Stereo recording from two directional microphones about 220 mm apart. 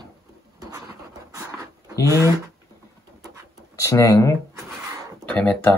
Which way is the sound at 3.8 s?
15° left (ahead or behind).